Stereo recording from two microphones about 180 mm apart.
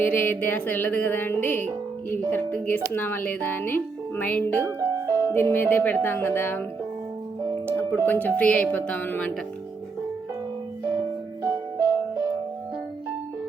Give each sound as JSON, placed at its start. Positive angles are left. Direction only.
{"t": 0.1, "sound": "speech", "side_deg": 10}
{"t": 4.8, "sound": "music", "side_deg": -15}
{"t": 5.3, "sound": "speech", "side_deg": 10}
{"t": 7.7, "sound": "speech", "side_deg": 10}
{"t": 11.4, "sound": "music", "side_deg": -15}